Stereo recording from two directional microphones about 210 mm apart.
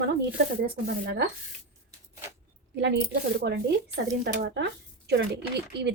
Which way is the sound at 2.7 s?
55° right (ahead or behind).